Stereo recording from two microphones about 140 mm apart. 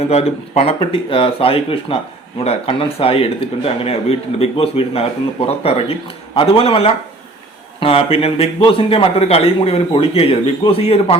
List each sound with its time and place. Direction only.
0.0 s speech: 45° left (ahead or behind)